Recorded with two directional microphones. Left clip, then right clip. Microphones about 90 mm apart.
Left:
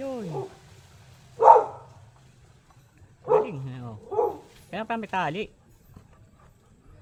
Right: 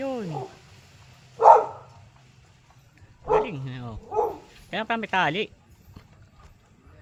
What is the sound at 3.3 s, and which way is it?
Bow-wow, 15° right (ahead or behind).